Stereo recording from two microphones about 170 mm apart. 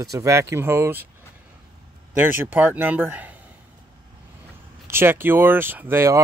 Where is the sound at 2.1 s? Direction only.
10° right (ahead or behind).